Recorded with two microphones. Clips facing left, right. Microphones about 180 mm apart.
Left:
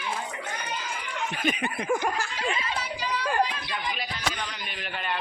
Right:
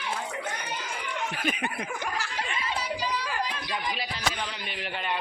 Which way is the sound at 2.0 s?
50° left (ahead or behind).